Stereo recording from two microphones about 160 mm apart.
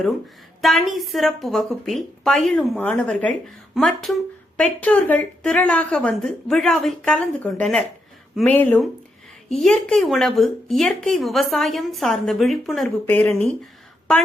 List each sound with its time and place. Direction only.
0.6 s speech: centre (ahead or behind)
13.1 s speech: 15° left (ahead or behind)